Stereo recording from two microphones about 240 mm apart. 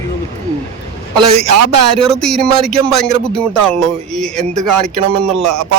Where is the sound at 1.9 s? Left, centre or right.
Centre.